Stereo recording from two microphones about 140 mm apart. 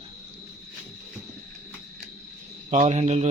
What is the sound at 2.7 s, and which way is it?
Speech, 55° right (ahead or behind).